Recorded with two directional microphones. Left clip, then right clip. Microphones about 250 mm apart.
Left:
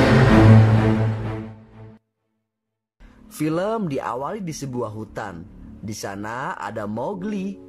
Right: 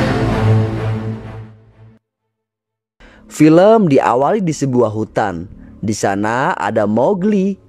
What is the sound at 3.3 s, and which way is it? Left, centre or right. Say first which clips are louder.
Speech: right 15 dB; right.